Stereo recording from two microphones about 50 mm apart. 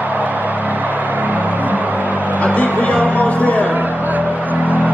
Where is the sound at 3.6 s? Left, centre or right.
Right.